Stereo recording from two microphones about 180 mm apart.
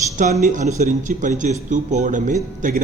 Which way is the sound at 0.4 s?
45° right (ahead or behind).